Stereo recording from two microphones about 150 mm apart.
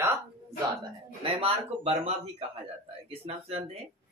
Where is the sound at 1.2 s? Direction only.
40° right (ahead or behind).